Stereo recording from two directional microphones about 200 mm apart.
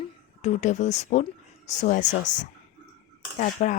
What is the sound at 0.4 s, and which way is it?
Speech, 35° left (ahead or behind).